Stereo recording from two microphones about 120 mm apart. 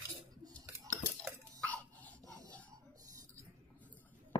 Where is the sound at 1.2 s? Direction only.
10° left (ahead or behind).